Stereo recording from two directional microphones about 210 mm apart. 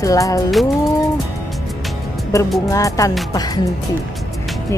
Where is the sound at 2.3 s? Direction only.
15° left (ahead or behind).